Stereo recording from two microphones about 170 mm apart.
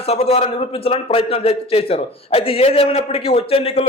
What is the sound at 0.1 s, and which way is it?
A man's voice, 35° left (ahead or behind).